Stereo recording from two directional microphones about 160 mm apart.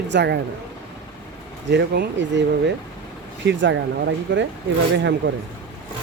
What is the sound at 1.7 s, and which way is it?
Speech, 90° right.